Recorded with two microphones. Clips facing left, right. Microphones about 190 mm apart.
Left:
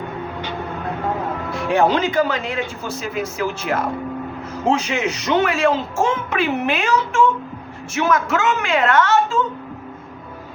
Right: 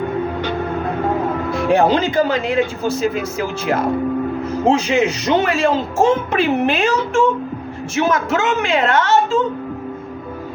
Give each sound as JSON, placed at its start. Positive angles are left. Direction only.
{"t": 1.7, "sound": "a woman's voice", "side_deg": -35}